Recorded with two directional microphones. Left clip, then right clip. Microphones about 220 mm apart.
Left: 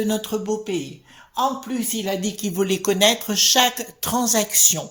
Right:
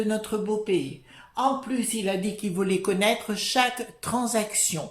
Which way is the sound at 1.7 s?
30° left (ahead or behind).